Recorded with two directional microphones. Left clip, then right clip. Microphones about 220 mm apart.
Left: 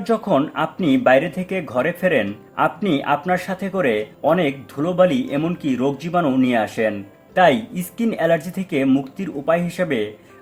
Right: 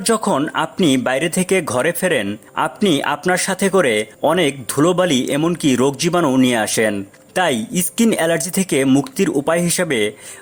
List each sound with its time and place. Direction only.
0.0 s speech: 35° right (ahead or behind)